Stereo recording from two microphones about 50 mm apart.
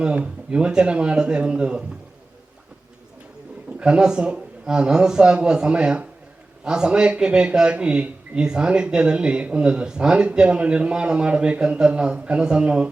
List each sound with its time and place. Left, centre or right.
0.2 s speech: right
3.8 s a man's voice: centre